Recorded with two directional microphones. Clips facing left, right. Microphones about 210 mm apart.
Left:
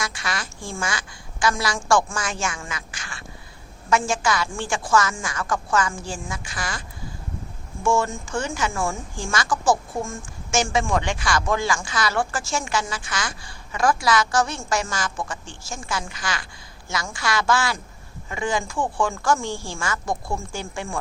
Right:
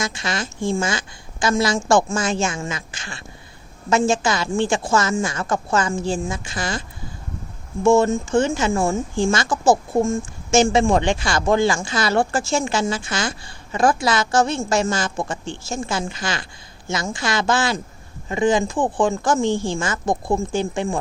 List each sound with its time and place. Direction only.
0.0 s speech: 25° right (ahead or behind)
7.9 s speech: 25° right (ahead or behind)